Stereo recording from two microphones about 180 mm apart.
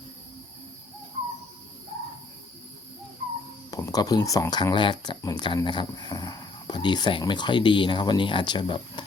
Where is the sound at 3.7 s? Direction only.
20° left (ahead or behind).